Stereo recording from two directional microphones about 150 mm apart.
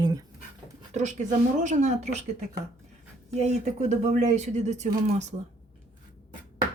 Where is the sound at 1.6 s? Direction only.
50° right (ahead or behind).